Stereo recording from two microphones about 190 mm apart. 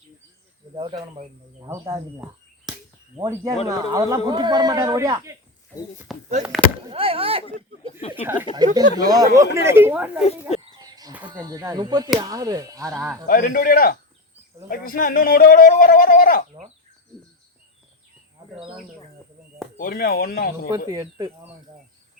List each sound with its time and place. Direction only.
0.7 s a man's voice: 25° right (ahead or behind)
6.1 s speech: centre (ahead or behind)
6.9 s a man's voice: 30° right (ahead or behind)
8.2 s speech: 10° right (ahead or behind)
8.5 s a man's voice: 20° right (ahead or behind)
10.7 s a sound: 20° right (ahead or behind)
11.3 s a man's voice: 20° right (ahead or behind)
13.2 s a man's voice: 45° left (ahead or behind)
19.7 s a man's voice: 50° left (ahead or behind)
20.7 s a man's voice: 20° right (ahead or behind)